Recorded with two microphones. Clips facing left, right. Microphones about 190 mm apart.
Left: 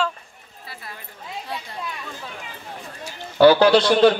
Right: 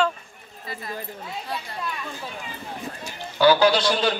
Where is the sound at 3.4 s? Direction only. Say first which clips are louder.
Left 4 dB; 60° left (ahead or behind).